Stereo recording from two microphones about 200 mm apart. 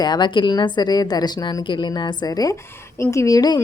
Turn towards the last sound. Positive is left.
turn(degrees=20)  # may be behind; listen again after turning